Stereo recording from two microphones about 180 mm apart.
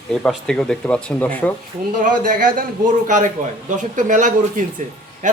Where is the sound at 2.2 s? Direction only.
45° right (ahead or behind).